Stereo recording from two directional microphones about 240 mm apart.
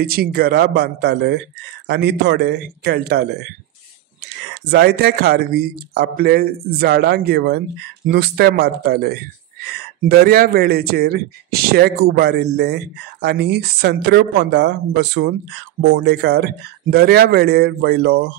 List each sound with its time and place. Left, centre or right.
0.0 s speech: right
4.6 s speech: right